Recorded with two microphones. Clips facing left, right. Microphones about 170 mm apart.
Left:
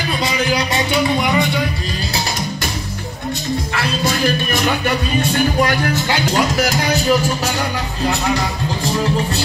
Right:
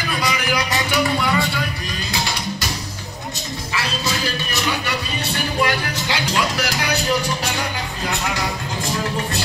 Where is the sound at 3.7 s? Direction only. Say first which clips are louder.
Left 1 dB; 50° left (ahead or behind).